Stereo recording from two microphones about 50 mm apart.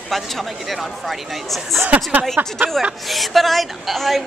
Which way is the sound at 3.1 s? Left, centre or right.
Centre.